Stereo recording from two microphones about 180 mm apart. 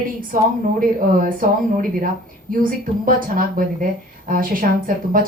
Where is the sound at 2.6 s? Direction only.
50° right (ahead or behind).